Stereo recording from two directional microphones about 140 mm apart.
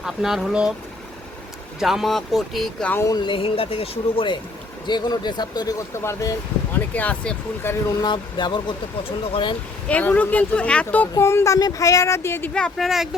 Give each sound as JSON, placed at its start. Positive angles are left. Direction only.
{"t": 0.0, "sound": "speech", "side_deg": -5}
{"t": 1.8, "sound": "speech", "side_deg": 0}
{"t": 2.9, "sound": "speech", "side_deg": 20}
{"t": 3.2, "sound": "speech", "side_deg": 35}
{"t": 5.9, "sound": "speech", "side_deg": 20}
{"t": 8.0, "sound": "speech", "side_deg": 30}
{"t": 9.9, "sound": "speech", "side_deg": 10}
{"t": 12.5, "sound": "speech", "side_deg": 5}